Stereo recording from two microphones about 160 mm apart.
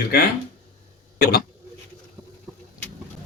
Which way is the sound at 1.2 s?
70° left (ahead or behind).